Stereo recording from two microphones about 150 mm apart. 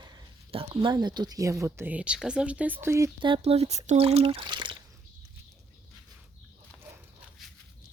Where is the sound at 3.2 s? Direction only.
35° right (ahead or behind).